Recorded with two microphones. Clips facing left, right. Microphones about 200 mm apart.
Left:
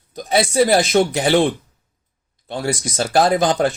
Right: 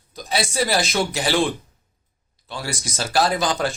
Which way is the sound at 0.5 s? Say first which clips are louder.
Left 8 dB; 50° left (ahead or behind).